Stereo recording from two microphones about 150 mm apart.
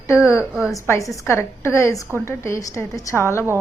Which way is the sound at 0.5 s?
5° right (ahead or behind).